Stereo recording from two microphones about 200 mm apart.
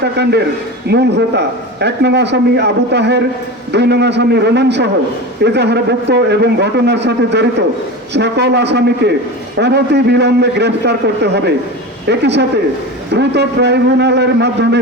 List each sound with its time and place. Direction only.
0.0 s a man's voice: 55° right (ahead or behind)